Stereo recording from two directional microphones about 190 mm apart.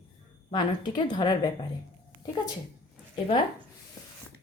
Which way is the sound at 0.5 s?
25° left (ahead or behind).